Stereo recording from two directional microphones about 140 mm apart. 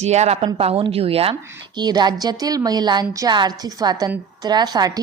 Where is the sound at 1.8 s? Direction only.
30° right (ahead or behind).